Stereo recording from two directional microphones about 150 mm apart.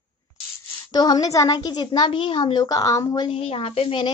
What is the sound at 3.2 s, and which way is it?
Speech, 40° left (ahead or behind).